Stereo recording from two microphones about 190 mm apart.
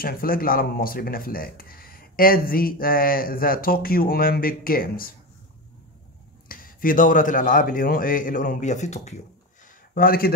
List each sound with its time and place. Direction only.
0.0 s speech: 50° left (ahead or behind)
6.5 s speech: 45° left (ahead or behind)
9.9 s speech: 50° left (ahead or behind)